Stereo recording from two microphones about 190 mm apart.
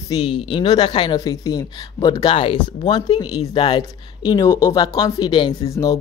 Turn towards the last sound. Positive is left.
turn(degrees=15)  # may be behind; listen again after turning